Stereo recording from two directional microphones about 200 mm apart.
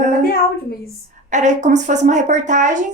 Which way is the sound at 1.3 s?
35° right (ahead or behind).